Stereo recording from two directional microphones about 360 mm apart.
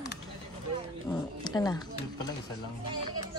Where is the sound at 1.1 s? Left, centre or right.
Centre.